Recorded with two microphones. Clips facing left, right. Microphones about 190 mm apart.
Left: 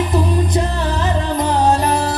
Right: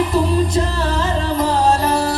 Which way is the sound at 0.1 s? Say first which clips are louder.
Right 1 dB; 20° left (ahead or behind).